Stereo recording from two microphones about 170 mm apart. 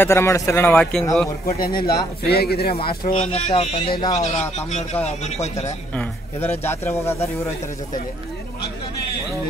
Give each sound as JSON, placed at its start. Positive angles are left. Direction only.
{"t": 0.0, "sound": "a man's voice", "side_deg": 15}
{"t": 1.6, "sound": "speech", "side_deg": 60}
{"t": 3.2, "sound": "speech", "side_deg": 40}
{"t": 4.2, "sound": "speech", "side_deg": 40}
{"t": 6.6, "sound": "a man's voice", "side_deg": 15}